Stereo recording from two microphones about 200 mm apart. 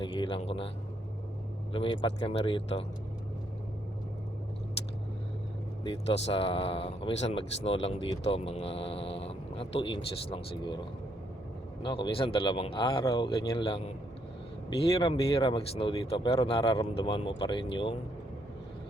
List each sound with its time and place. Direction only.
0.0 s a sound: 25° left (ahead or behind)
1.7 s speech: 25° left (ahead or behind)
5.8 s speech: 30° left (ahead or behind)
11.8 s speech: 25° left (ahead or behind)